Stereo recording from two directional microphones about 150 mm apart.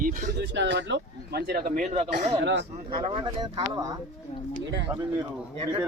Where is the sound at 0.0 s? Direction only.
65° right (ahead or behind).